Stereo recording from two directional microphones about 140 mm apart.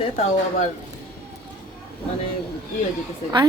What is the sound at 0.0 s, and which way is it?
Speech, 50° left (ahead or behind).